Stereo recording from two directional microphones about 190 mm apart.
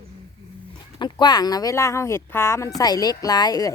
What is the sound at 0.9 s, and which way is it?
Speech, 25° left (ahead or behind).